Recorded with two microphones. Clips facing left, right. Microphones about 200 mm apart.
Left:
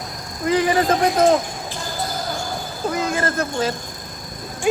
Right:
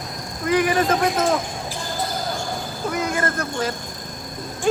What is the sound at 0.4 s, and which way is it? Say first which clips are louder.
Speech: left 1 dB; 30° left (ahead or behind).